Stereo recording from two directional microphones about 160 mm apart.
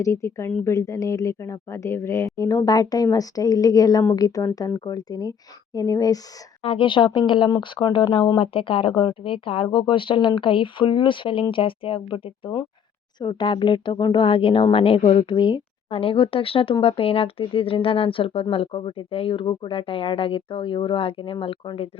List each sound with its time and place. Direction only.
0.0 s speech: 20° left (ahead or behind)
6.6 s speech: 35° left (ahead or behind)